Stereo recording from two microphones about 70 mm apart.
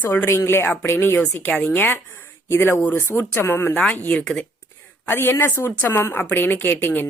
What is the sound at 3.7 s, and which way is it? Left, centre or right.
Speech, centre.